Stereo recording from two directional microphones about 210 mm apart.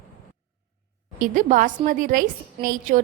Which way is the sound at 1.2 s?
40° right (ahead or behind).